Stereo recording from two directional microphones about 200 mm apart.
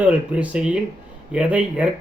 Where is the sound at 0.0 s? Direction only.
5° right (ahead or behind).